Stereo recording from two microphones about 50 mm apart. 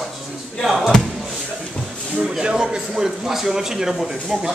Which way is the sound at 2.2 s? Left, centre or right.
Centre.